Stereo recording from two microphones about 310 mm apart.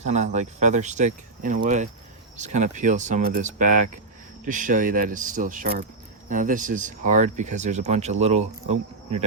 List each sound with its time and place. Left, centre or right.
0.0 s speech: right